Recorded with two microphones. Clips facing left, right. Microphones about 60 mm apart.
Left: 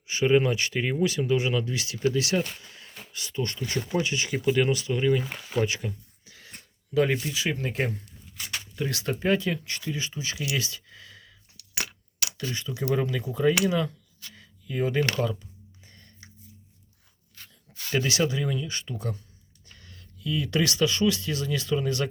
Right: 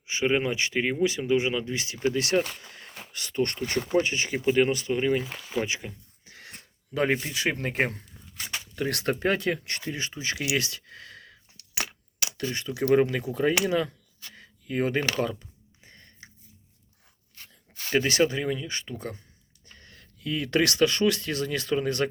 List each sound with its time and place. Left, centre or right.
0.1 s speech: centre; by 4.1 s right
4.1 s speech: right
5.5 s speech: centre
6.2 s wheeze: right
6.9 s speech: right
7.3 s speech: right
8.7 s speech: right
10.5 s a sound: right
11.8 s a sound: right
12.7 s speech: right
13.6 s a sound: right
15.1 s speech: right
15.9 s a sound: right
17.7 s speech: right